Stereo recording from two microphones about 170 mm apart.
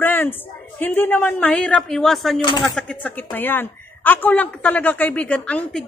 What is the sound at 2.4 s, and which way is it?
Speech, 25° left (ahead or behind).